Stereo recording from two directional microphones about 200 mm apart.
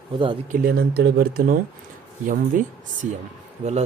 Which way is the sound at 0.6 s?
50° right (ahead or behind).